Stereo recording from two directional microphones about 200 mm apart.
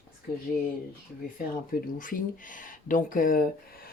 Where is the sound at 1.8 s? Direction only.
45° left (ahead or behind).